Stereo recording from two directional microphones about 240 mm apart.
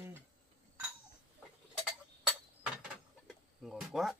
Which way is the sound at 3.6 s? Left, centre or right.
Centre.